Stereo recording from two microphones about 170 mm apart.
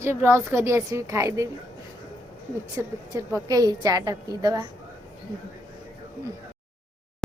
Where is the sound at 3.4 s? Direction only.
20° right (ahead or behind).